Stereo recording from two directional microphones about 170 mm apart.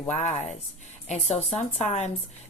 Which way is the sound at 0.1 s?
40° left (ahead or behind).